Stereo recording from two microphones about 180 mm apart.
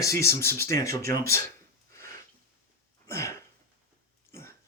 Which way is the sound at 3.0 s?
15° left (ahead or behind).